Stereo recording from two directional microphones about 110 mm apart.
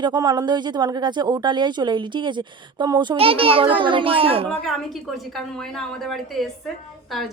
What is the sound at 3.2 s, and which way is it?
A child's voice, 55° right (ahead or behind).